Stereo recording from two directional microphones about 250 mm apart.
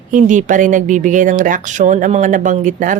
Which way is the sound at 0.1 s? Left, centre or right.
Right.